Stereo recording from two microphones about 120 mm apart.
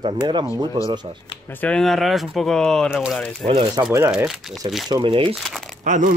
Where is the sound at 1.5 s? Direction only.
10° left (ahead or behind).